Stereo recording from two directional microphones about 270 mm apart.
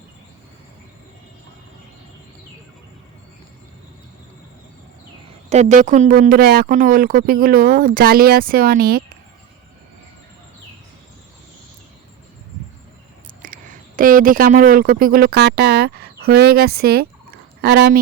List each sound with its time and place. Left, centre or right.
5.5 s speech: right
13.4 s speech: right